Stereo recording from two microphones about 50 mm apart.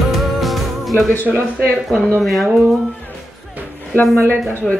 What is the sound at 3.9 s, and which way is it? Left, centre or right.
Speech, left.